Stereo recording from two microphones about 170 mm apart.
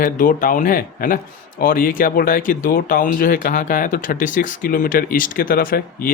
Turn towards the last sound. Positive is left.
turn(degrees=60)  # may be behind; listen again after turning